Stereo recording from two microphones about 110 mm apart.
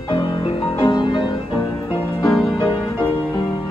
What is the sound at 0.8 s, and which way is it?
Music, 45° left (ahead or behind).